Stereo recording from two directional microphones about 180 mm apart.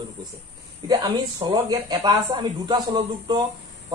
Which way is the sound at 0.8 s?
20° right (ahead or behind).